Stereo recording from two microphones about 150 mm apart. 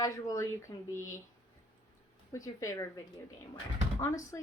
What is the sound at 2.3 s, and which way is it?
Speech, 20° left (ahead or behind).